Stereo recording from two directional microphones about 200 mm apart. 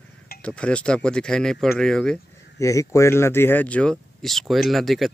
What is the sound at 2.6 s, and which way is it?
Speech, 15° left (ahead or behind).